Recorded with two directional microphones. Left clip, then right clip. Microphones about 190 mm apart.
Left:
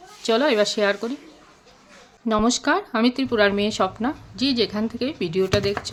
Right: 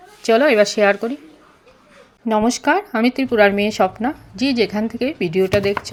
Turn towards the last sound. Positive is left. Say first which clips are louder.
# right 5 dB
turn(degrees=-15)  # may be behind; listen again after turning